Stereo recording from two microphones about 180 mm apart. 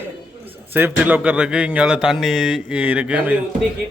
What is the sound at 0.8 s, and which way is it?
Speech, 10° right (ahead or behind).